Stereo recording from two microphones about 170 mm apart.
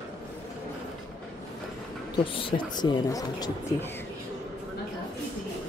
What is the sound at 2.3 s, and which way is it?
Speech, 30° left (ahead or behind).